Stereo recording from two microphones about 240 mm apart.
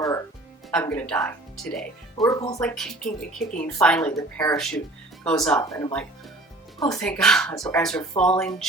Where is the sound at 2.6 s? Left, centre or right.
Centre.